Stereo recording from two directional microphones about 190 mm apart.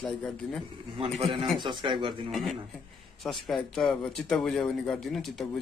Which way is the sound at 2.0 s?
Centre (ahead or behind).